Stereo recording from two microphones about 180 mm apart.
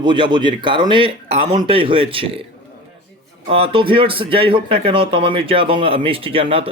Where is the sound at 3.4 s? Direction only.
30° right (ahead or behind).